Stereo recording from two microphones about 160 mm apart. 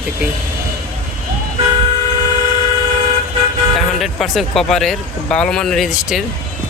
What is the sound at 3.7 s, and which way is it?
Speech, centre (ahead or behind).